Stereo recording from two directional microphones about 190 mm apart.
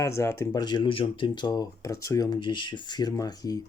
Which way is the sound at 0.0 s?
15° left (ahead or behind).